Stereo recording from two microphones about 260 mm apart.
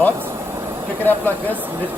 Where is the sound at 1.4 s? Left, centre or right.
Centre.